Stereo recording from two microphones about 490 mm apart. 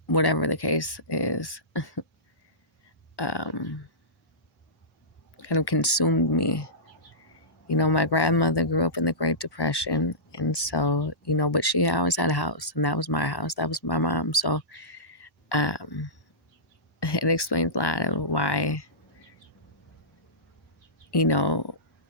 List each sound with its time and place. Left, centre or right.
0.1 s speech: left
3.2 s a sound: left
5.4 s speech: left
7.7 s speech: left
21.1 s speech: left